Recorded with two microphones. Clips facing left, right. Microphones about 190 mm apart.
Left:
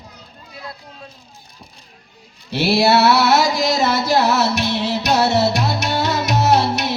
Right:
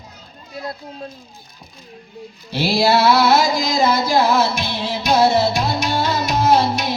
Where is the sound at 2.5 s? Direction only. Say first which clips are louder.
Left 1 dB; 70° left (ahead or behind).